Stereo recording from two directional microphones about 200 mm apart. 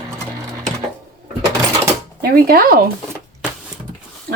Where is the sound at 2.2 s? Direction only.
50° right (ahead or behind).